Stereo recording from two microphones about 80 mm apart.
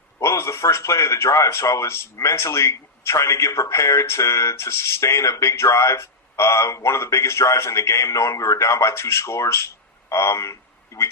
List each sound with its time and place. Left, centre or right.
0.2 s speech: left